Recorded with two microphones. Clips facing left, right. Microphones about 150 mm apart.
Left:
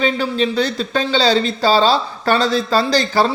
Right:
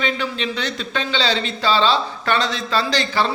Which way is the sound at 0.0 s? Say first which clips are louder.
Left 6 dB; 35° left (ahead or behind).